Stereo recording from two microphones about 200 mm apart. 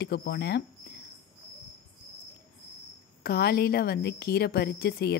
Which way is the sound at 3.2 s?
50° left (ahead or behind).